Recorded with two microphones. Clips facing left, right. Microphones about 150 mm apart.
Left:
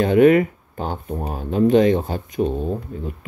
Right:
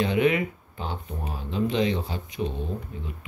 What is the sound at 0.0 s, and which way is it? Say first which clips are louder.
Speech: left 9 dB; 45° left (ahead or behind).